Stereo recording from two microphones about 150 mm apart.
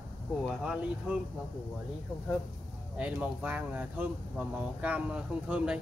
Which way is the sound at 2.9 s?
10° right (ahead or behind).